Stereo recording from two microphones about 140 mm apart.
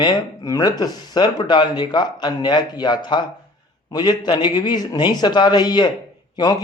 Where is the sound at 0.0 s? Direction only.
25° left (ahead or behind).